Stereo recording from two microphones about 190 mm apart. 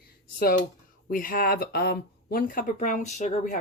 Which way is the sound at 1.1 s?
50° left (ahead or behind).